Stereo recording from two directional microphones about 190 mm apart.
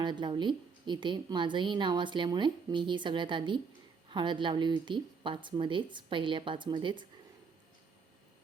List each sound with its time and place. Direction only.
0.0 s a woman's voice: 25° right (ahead or behind)